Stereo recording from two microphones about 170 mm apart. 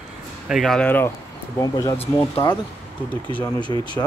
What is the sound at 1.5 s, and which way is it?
Speech, 20° left (ahead or behind).